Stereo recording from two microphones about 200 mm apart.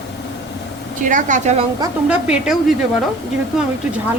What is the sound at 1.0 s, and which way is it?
Speech, 40° right (ahead or behind).